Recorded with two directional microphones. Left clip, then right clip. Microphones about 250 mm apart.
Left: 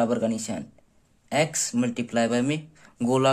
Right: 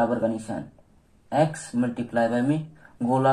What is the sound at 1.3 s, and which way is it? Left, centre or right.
Speech, left.